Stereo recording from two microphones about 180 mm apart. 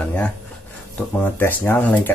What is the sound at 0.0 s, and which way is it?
Speech, 5° left (ahead or behind).